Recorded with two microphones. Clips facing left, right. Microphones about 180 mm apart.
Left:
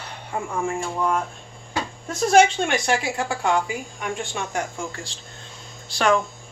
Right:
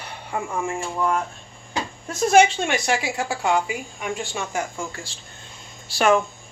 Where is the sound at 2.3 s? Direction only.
5° right (ahead or behind).